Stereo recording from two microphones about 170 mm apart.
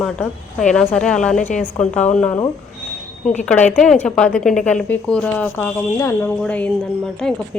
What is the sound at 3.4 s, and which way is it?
A woman's voice, 10° left (ahead or behind).